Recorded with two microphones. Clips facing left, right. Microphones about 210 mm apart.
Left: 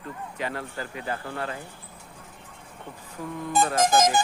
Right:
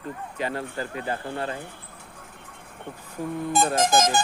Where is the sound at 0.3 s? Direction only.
35° right (ahead or behind).